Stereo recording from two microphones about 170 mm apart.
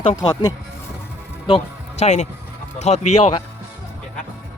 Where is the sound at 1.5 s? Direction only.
40° left (ahead or behind).